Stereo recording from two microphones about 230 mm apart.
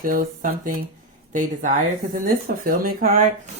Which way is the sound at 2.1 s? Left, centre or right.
Right.